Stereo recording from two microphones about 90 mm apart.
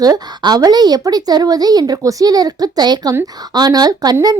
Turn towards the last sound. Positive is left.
turn(degrees=-45)  # may be behind; listen again after turning